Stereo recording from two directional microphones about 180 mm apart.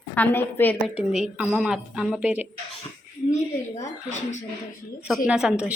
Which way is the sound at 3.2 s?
40° left (ahead or behind).